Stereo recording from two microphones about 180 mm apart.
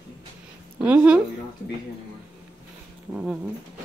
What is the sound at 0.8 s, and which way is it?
Speech, 10° right (ahead or behind).